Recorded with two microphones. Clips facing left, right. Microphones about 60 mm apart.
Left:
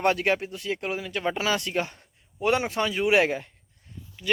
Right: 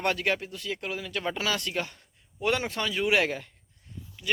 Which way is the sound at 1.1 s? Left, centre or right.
Centre.